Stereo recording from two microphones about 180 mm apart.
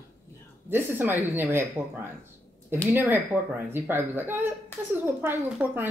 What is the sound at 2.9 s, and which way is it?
Speech, 10° right (ahead or behind).